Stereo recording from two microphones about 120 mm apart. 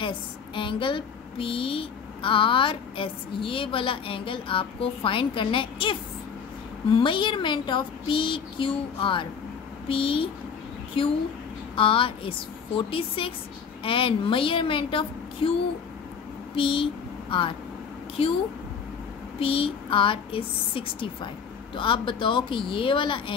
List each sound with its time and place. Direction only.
0.6 s speech: 45° left (ahead or behind)
16.5 s speech: 45° left (ahead or behind)
19.4 s speech: 50° left (ahead or behind)